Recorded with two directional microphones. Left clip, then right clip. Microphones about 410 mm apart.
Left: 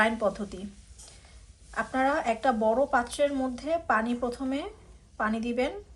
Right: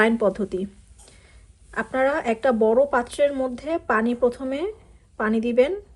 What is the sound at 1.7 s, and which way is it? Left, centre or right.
Speech, centre.